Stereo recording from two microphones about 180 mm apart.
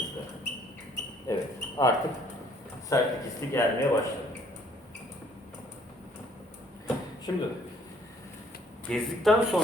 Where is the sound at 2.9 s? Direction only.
15° left (ahead or behind).